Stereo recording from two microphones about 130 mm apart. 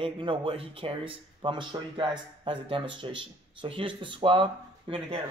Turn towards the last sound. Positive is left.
turn(degrees=-45)  # may be behind; listen again after turning